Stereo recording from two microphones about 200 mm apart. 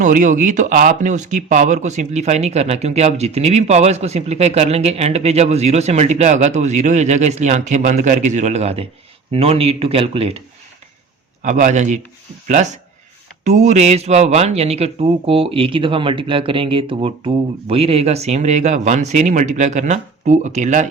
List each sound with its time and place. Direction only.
0.0 s speech: 40° right (ahead or behind)
11.4 s speech: 35° right (ahead or behind)
13.4 s speech: 35° right (ahead or behind)